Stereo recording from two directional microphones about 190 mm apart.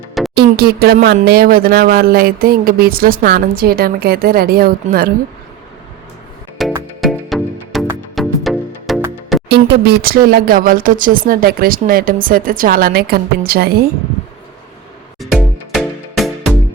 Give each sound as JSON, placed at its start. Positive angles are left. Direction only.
{"t": 0.3, "sound": "music", "side_deg": -55}
{"t": 1.0, "sound": "speech", "side_deg": -55}
{"t": 6.6, "sound": "music", "side_deg": 0}
{"t": 9.5, "sound": "speech", "side_deg": -60}
{"t": 15.2, "sound": "music", "side_deg": 0}